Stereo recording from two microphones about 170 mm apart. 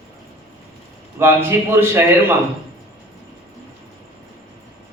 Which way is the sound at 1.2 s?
15° right (ahead or behind).